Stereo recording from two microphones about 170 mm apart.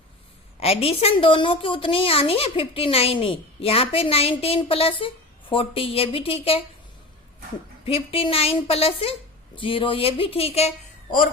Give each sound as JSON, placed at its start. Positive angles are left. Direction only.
{"t": 0.6, "sound": "a woman's voice", "side_deg": 35}
{"t": 7.9, "sound": "a woman's voice", "side_deg": 35}